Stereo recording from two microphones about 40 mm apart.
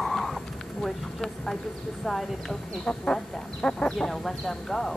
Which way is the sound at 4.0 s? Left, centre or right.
Centre.